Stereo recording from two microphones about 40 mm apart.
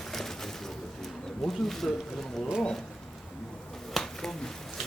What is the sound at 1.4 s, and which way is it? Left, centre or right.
Speech, centre.